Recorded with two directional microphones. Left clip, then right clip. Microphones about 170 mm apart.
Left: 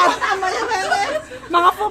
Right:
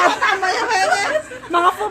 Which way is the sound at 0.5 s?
70° right (ahead or behind).